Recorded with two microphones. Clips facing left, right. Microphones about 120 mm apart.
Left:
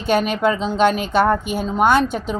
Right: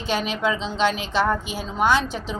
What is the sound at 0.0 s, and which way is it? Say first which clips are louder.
A woman's voice: left 6 dB; 50° left (ahead or behind).